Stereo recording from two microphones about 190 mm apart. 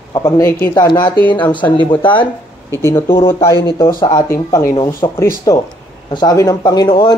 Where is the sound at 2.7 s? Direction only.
15° left (ahead or behind).